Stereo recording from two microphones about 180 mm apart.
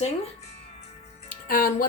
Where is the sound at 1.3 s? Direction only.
50° left (ahead or behind).